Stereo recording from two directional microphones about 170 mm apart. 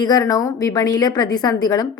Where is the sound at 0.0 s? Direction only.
20° left (ahead or behind).